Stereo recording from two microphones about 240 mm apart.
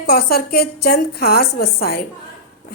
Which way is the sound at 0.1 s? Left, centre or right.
Left.